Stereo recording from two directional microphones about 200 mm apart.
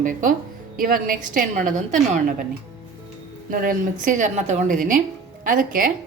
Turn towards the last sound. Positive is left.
turn(degrees=-45)  # may be behind; listen again after turning